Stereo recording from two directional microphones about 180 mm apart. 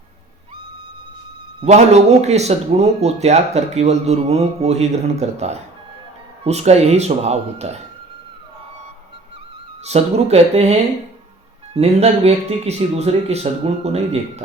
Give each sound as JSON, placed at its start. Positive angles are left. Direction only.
{"t": 1.6, "sound": "speech", "side_deg": -35}
{"t": 9.8, "sound": "speech", "side_deg": -35}